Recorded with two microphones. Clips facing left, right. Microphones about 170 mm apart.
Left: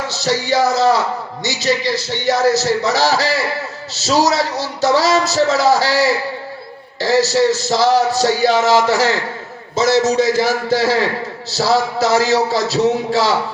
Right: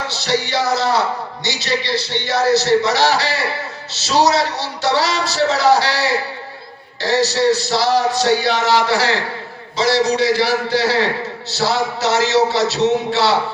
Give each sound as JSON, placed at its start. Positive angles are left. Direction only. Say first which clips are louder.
{"t": 0.1, "sound": "a man's voice", "louder": "left 3 dB", "side_deg": 40}